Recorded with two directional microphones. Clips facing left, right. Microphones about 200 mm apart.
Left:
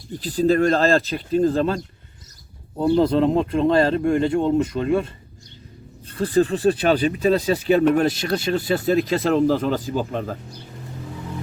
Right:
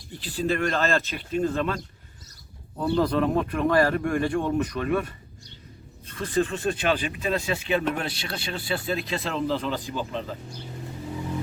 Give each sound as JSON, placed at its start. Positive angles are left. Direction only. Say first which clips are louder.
{"t": 0.1, "sound": "speech", "louder": "left 8 dB", "side_deg": 40}
{"t": 2.7, "sound": "speech", "louder": "left 6 dB", "side_deg": 25}